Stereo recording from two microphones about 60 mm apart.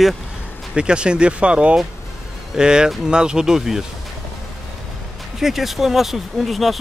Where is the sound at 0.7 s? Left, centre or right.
Centre.